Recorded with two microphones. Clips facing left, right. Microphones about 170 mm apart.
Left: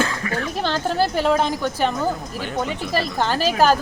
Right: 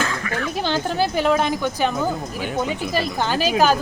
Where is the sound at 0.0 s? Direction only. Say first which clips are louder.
Left 1 dB; 30° left (ahead or behind).